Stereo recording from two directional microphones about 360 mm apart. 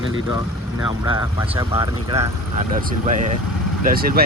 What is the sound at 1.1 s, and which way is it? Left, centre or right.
Speech, centre.